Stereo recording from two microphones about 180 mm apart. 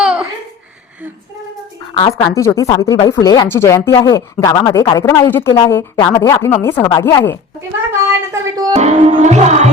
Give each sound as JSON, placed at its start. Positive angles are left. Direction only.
{"t": 0.0, "sound": "a sound", "side_deg": -5}
{"t": 2.0, "sound": "speech", "side_deg": 25}
{"t": 8.3, "sound": "music", "side_deg": -20}
{"t": 8.7, "sound": "music", "side_deg": -40}